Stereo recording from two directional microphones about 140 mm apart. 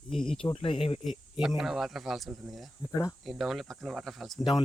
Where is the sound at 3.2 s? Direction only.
Centre (ahead or behind).